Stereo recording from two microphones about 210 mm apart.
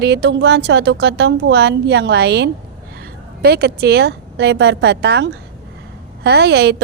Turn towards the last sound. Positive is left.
turn(degrees=-50)  # may be behind; listen again after turning